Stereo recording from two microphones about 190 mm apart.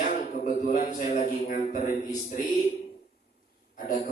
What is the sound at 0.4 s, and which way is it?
A man's voice, 40° left (ahead or behind).